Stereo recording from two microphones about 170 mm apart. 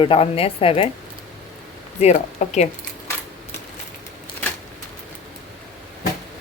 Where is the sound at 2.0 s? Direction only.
40° left (ahead or behind).